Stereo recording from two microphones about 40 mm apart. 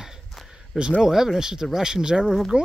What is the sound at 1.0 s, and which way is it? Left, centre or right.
Speech, centre.